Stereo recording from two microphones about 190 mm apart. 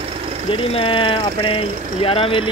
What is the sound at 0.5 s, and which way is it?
Speech, 30° left (ahead or behind).